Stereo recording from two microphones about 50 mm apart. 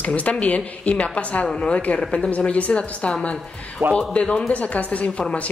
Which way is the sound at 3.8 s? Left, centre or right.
Right.